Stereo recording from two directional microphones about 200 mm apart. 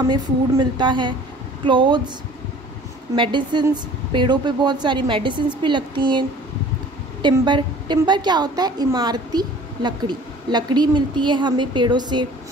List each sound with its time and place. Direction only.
0.0 s a woman's voice: 20° right (ahead or behind)
3.2 s a woman's voice: 25° right (ahead or behind)